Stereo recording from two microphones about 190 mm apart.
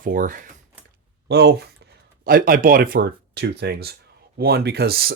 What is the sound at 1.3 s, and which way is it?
Speech, 60° right (ahead or behind).